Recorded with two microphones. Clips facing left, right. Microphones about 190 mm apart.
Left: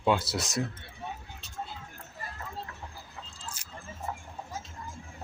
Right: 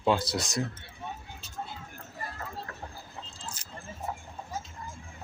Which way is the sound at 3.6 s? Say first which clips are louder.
Right 2 dB; 10° left (ahead or behind).